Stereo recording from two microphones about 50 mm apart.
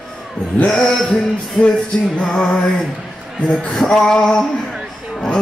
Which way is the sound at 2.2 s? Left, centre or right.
Centre.